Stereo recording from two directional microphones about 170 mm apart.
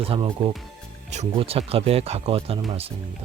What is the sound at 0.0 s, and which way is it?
Speech, 30° right (ahead or behind).